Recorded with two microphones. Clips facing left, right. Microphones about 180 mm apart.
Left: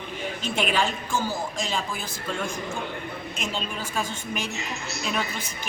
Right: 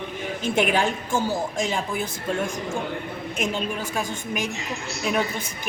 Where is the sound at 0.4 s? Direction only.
15° right (ahead or behind).